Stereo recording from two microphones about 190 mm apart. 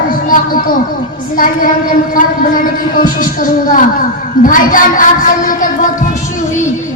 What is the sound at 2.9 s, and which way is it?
A woman's voice, 45° left (ahead or behind).